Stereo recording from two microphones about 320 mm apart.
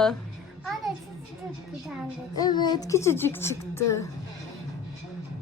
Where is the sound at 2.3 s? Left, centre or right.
Centre.